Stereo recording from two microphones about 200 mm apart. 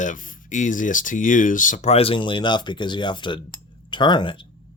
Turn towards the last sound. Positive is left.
turn(degrees=25)  # may be behind; listen again after turning